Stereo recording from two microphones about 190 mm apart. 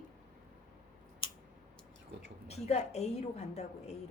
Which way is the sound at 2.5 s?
35° left (ahead or behind).